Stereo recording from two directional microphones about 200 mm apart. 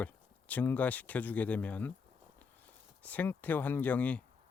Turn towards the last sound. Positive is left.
turn(degrees=5)  # may be behind; listen again after turning